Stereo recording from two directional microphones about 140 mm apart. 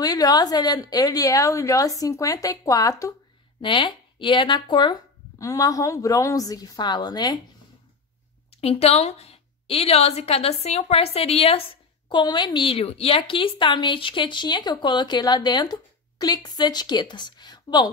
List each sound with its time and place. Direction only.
0.0 s a woman's voice: 30° left (ahead or behind)
3.6 s a woman's voice: 35° left (ahead or behind)
5.4 s a woman's voice: 25° left (ahead or behind)
8.5 s a woman's voice: 45° left (ahead or behind); by 17.8 s 30° left (ahead or behind)